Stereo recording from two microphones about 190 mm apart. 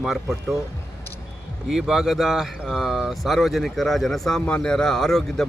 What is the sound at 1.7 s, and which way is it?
Speech, centre (ahead or behind).